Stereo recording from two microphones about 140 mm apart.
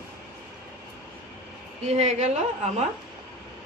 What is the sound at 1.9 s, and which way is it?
Speech, 50° right (ahead or behind).